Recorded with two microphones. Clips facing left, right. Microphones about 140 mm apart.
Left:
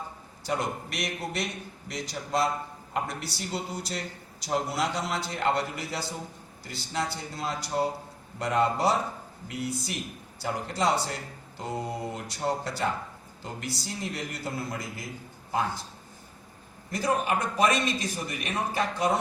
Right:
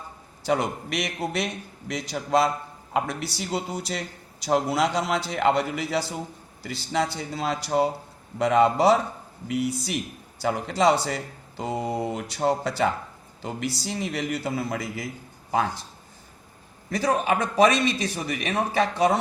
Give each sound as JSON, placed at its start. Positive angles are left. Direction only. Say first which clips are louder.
{"t": 0.4, "sound": "a man's voice", "louder": "right 5 dB", "side_deg": -80}
{"t": 16.9, "sound": "a man's voice", "louder": "right 4 dB", "side_deg": -90}